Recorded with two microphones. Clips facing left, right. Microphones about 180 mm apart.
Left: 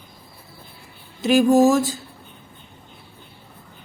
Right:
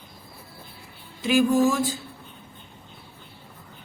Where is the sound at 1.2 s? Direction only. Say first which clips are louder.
Left 5 dB; 45° left (ahead or behind).